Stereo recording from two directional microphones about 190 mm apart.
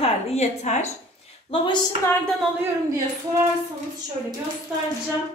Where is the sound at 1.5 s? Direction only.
30° left (ahead or behind).